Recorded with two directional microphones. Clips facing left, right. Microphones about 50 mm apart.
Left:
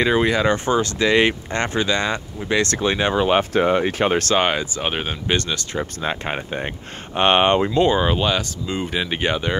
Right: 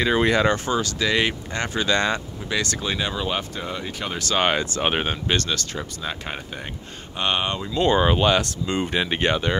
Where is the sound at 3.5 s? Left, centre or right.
Left.